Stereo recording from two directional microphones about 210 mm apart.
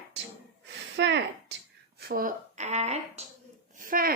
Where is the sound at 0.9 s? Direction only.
55° right (ahead or behind).